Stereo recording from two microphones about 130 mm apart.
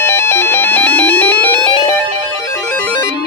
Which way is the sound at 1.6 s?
40° left (ahead or behind).